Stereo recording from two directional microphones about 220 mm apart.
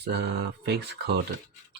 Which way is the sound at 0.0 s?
50° right (ahead or behind).